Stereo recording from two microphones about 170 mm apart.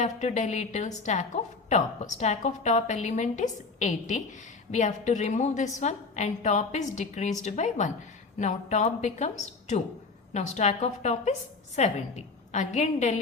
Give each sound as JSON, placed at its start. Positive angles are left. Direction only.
{"t": 0.0, "sound": "a woman's voice", "side_deg": 45}